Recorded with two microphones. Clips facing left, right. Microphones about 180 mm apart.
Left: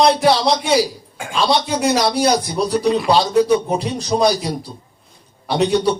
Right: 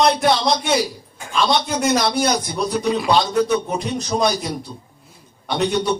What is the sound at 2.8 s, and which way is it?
Speech, centre (ahead or behind).